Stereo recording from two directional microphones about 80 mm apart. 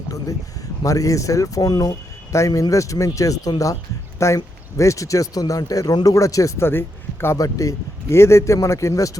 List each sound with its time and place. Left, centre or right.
0.9 s a man's voice: left
6.1 s a man's voice: left
7.3 s a man's voice: left